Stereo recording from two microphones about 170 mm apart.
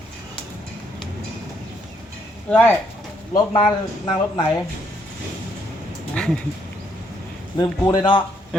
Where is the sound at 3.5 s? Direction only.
30° left (ahead or behind).